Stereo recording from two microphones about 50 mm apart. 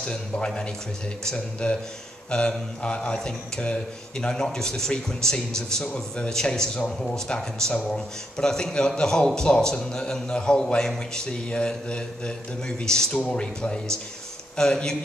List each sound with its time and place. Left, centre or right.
0.0 s a man's voice: centre